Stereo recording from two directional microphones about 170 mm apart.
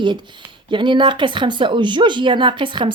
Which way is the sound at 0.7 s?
30° right (ahead or behind).